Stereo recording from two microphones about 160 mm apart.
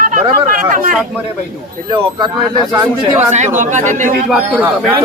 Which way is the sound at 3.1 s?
45° right (ahead or behind).